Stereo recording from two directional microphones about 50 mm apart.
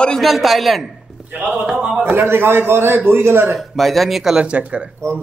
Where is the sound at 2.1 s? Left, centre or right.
Right.